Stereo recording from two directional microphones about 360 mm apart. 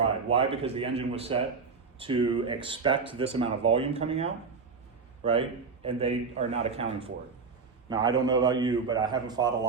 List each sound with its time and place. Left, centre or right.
0.0 s speech: centre